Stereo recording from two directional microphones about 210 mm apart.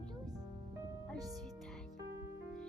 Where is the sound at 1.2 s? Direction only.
15° right (ahead or behind).